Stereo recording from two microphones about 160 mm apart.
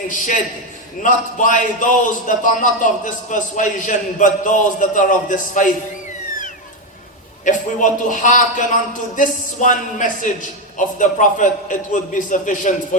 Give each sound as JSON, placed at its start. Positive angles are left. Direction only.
{"t": 1.0, "sound": "a man's voice", "side_deg": 55}
{"t": 7.4, "sound": "a man's voice", "side_deg": 55}